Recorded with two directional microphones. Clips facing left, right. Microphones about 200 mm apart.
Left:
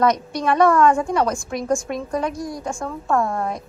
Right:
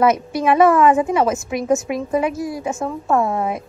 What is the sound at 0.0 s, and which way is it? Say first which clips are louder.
A woman's voice: right 3 dB; 5° right (ahead or behind).